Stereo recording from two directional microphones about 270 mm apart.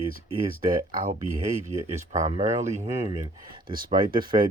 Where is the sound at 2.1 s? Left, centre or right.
Right.